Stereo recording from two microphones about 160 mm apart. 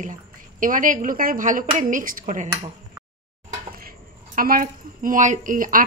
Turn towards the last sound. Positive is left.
turn(degrees=-60)  # may be behind; listen again after turning